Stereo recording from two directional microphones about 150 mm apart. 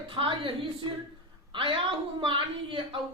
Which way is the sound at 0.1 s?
35° right (ahead or behind).